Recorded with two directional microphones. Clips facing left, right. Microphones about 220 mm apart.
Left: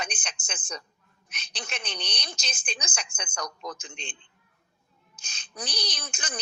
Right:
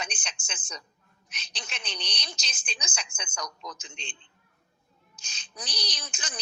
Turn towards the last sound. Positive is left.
turn(degrees=55)  # may be behind; listen again after turning